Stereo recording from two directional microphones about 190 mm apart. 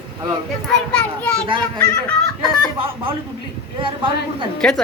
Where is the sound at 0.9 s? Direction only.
5° left (ahead or behind).